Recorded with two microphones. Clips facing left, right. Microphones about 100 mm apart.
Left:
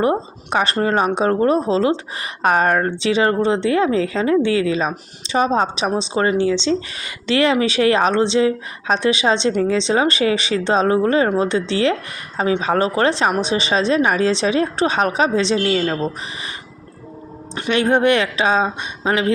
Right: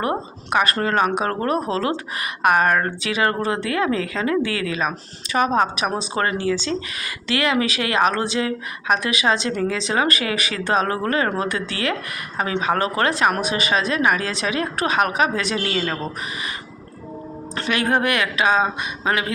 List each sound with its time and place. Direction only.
0.0 s speech: 25° left (ahead or behind)
17.5 s speech: 25° left (ahead or behind)